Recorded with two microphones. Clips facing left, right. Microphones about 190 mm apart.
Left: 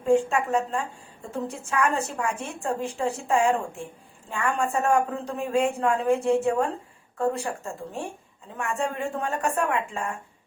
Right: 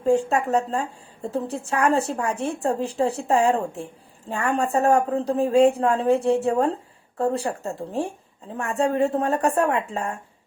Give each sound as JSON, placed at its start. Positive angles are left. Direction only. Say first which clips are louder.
{"t": 0.0, "sound": "a woman's voice", "louder": "right 1 dB", "side_deg": -35}